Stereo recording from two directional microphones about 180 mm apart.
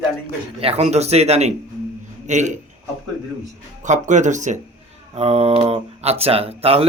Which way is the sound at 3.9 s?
40° right (ahead or behind).